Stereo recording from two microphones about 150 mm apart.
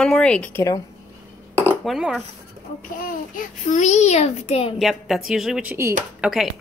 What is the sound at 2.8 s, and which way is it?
A child's voice, 65° left (ahead or behind).